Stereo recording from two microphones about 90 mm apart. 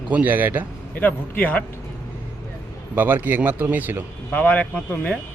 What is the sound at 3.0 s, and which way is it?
Speech, 25° right (ahead or behind).